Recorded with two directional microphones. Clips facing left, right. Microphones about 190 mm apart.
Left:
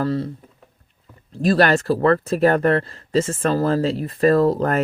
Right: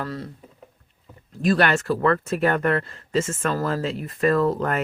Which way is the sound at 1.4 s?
35° left (ahead or behind).